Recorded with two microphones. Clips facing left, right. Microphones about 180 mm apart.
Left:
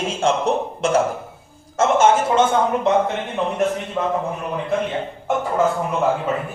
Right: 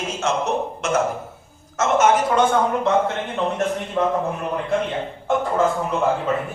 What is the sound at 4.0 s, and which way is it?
Speech, 10° left (ahead or behind).